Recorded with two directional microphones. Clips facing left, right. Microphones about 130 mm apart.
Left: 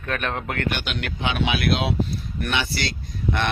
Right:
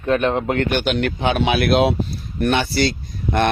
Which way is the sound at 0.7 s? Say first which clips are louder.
Right 10 dB; 45° right (ahead or behind).